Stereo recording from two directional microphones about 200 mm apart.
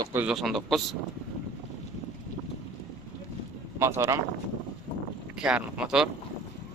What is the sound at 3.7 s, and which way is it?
Speech, 15° right (ahead or behind).